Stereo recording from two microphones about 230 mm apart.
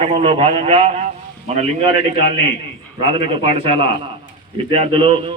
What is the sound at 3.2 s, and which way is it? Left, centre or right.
A man's voice, right.